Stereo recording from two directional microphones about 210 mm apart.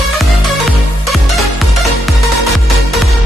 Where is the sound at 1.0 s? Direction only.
Centre (ahead or behind).